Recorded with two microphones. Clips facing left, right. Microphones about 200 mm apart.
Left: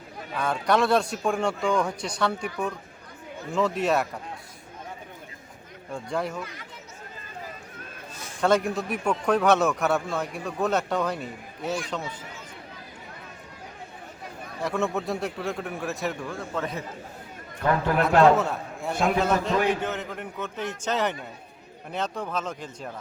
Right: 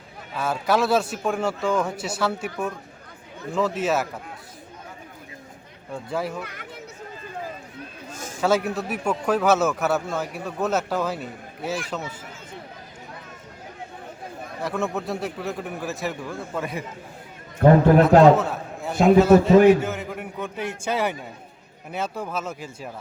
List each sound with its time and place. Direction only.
0.3 s a man's voice: 5° right (ahead or behind)
3.5 s a man's voice: centre (ahead or behind)
5.9 s a man's voice: 5° right (ahead or behind)
8.1 s a sound: 45° right (ahead or behind)
8.4 s a man's voice: 5° right (ahead or behind)
14.6 s a man's voice: centre (ahead or behind)
17.6 s a man's voice: 55° right (ahead or behind)
18.3 s a man's voice: centre (ahead or behind)
19.5 s a man's voice: 50° right (ahead or behind)
19.8 s a man's voice: 10° right (ahead or behind)